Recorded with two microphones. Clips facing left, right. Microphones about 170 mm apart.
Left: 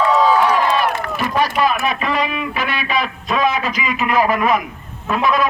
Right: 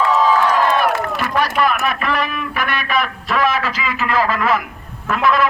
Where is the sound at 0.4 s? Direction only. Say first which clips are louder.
Even; 15° left (ahead or behind).